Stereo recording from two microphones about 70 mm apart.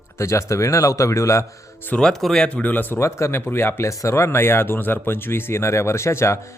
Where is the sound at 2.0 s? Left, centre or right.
Centre.